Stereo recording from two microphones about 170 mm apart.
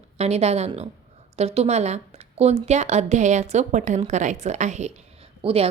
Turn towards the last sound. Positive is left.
turn(degrees=-35)  # may be behind; listen again after turning